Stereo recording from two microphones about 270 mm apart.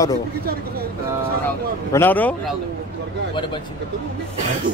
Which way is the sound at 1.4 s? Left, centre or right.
Centre.